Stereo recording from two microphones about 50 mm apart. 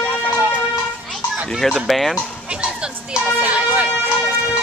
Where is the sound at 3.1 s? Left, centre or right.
Right.